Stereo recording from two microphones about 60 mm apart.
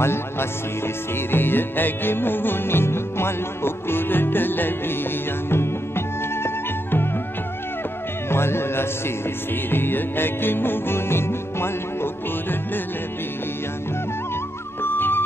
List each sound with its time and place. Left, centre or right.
0.0 s speech: left
1.3 s music: left
8.3 s music: left
14.8 s music: left